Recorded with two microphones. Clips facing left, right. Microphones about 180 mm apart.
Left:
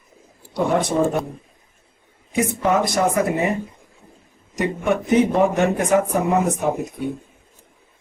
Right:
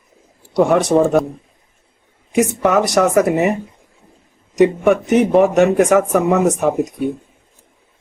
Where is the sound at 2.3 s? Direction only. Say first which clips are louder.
Right 4 dB; 80° right.